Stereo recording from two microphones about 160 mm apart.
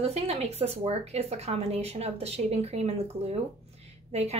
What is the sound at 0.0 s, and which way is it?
A woman's voice, 40° right (ahead or behind).